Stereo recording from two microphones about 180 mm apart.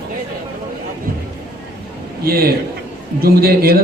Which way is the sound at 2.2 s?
60° right (ahead or behind).